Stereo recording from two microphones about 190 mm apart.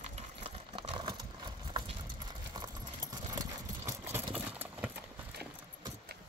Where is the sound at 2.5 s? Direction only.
20° right (ahead or behind).